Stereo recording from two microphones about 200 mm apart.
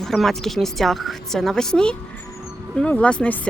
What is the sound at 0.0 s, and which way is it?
Speech, centre (ahead or behind).